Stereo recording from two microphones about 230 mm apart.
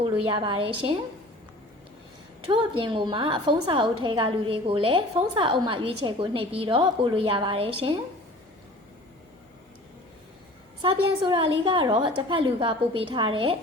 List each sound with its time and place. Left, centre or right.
0.0 s a woman's voice: right
2.5 s a woman's voice: right
10.8 s a woman's voice: right